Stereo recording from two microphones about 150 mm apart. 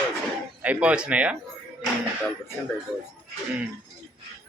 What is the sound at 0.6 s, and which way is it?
Speech, 10° right (ahead or behind).